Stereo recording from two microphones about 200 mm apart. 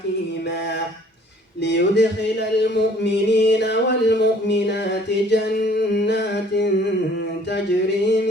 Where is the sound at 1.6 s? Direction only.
60° left (ahead or behind).